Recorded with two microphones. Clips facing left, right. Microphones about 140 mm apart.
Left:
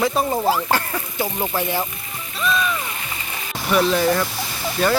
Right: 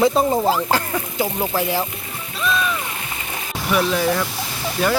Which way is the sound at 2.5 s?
Centre (ahead or behind).